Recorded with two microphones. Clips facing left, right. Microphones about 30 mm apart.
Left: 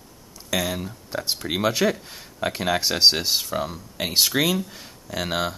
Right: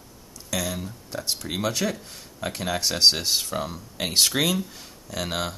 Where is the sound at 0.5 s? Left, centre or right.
Centre.